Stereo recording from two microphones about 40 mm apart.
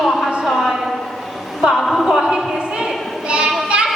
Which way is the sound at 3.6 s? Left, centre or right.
Right.